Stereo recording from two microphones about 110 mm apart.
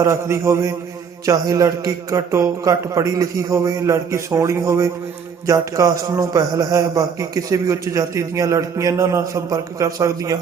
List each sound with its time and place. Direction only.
0.0 s a man's voice: 25° right (ahead or behind)